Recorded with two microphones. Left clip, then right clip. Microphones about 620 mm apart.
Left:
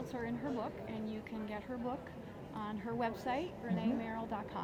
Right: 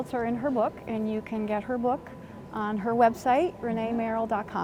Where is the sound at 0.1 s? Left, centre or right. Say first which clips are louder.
Right 13 dB; right.